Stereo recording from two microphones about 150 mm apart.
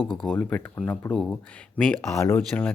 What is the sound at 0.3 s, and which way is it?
Speech, 10° left (ahead or behind).